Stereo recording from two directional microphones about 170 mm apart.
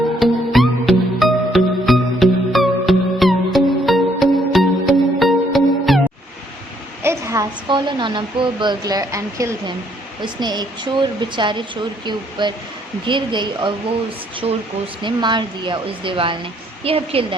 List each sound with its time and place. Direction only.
0.2 s music: centre (ahead or behind)
7.0 s a sound: 15° right (ahead or behind)
7.7 s a woman's voice: 25° right (ahead or behind)